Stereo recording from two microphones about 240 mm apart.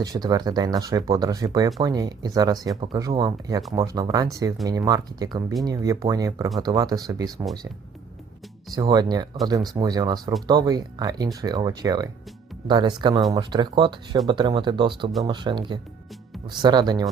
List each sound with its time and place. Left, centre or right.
0.0 s speech: centre
8.7 s speech: centre